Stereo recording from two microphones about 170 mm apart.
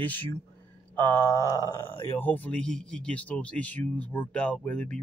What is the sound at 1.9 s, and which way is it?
Speech, 10° left (ahead or behind).